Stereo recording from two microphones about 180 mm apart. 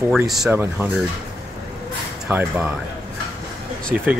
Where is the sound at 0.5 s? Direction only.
10° right (ahead or behind).